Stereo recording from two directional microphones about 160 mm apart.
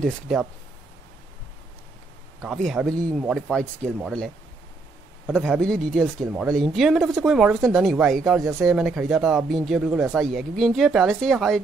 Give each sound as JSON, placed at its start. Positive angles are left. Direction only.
{"t": 0.0, "sound": "speech", "side_deg": 0}
{"t": 2.4, "sound": "speech", "side_deg": 0}
{"t": 5.3, "sound": "speech", "side_deg": 5}
{"t": 8.4, "sound": "speech", "side_deg": -20}
{"t": 8.6, "sound": "speech", "side_deg": -5}